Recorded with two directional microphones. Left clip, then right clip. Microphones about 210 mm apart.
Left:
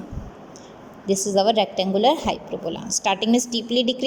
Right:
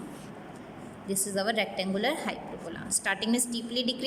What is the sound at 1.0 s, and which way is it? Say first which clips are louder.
A woman's voice: left 11 dB; 15° left (ahead or behind).